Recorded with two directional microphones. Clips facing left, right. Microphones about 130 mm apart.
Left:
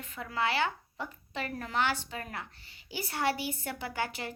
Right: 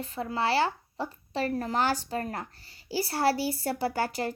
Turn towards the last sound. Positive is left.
turn(degrees=-40)  # may be behind; listen again after turning